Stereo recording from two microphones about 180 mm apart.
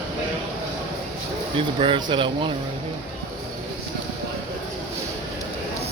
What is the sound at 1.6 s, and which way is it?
Speech, 30° right (ahead or behind).